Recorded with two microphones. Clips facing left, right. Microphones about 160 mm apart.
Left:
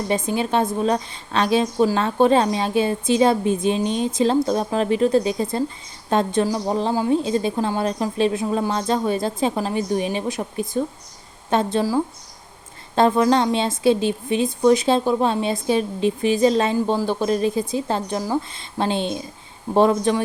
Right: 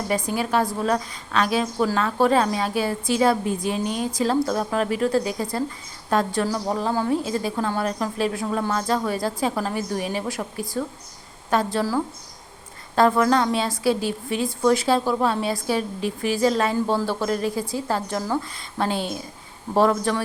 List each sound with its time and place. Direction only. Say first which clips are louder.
0.1 s speech: left 2 dB; 25° left (ahead or behind)